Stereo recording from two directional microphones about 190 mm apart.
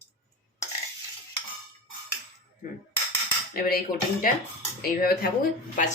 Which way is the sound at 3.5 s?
50° left (ahead or behind).